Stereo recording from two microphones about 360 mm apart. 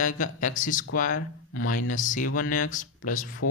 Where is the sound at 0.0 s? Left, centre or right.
Left.